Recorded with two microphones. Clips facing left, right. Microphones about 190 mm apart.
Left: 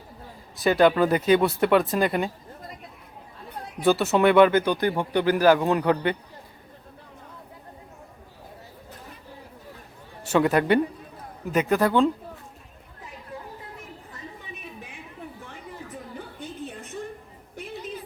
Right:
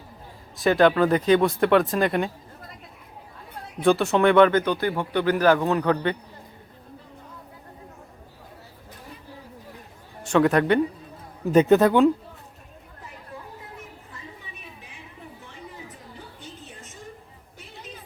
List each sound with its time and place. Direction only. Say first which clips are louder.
0.5 s speech: right 1 dB; centre (ahead or behind)
3.8 s speech: right 1 dB; 5° left (ahead or behind)
10.2 s speech: right 1 dB; 5° left (ahead or behind)
11.5 s speech: right 6 dB; 25° right (ahead or behind)
16.1 s a sound: left 6 dB; 60° left (ahead or behind)